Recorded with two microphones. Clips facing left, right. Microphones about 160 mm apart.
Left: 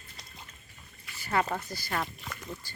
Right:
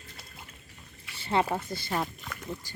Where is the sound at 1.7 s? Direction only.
25° right (ahead or behind).